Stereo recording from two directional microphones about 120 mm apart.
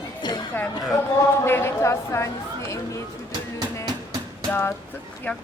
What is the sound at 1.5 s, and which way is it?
A woman's voice, 20° left (ahead or behind).